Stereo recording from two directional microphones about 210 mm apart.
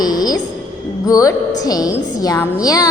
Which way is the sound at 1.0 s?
15° left (ahead or behind).